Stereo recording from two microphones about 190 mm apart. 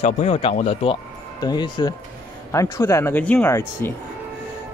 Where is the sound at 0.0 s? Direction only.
35° left (ahead or behind); by 3.9 s 10° left (ahead or behind).